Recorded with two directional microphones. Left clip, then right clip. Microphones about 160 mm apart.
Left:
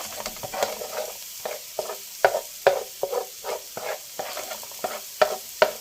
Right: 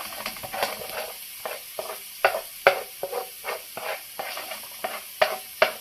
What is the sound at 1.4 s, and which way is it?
Stir, 30° left (ahead or behind).